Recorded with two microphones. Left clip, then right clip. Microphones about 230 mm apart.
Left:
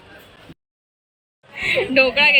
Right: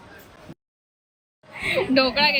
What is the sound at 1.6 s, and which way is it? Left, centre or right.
Speech, centre.